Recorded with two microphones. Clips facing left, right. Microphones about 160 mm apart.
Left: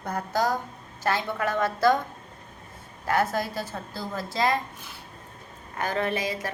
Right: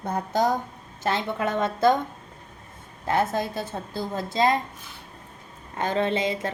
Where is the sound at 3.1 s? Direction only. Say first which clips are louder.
Right 1 dB; 20° right (ahead or behind).